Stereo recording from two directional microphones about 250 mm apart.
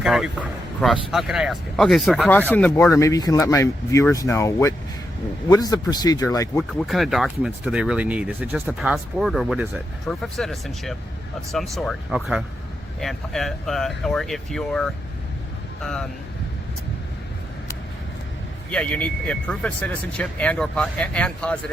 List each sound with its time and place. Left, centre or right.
0.0 s a man's voice: centre
6.7 s speech: centre
18.7 s speech: centre